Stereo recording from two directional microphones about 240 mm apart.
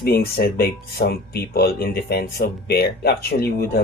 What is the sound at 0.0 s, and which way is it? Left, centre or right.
Speech, left.